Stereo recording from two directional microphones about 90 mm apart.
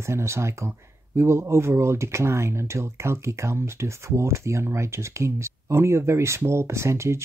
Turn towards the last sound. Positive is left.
turn(degrees=-30)  # may be behind; listen again after turning